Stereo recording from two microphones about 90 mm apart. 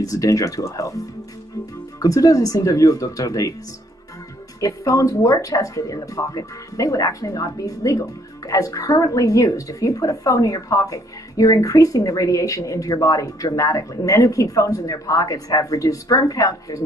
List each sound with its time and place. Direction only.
0.0 s speech: 40° left (ahead or behind)
2.0 s speech: 40° left (ahead or behind)
4.6 s speech: 40° left (ahead or behind)